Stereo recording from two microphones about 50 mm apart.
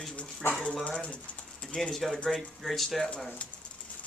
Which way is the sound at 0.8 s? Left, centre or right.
Left.